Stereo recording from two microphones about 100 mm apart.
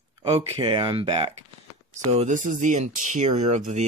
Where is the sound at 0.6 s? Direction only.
55° right (ahead or behind).